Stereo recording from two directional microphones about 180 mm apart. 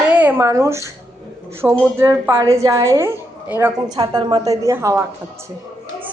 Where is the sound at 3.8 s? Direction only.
25° right (ahead or behind).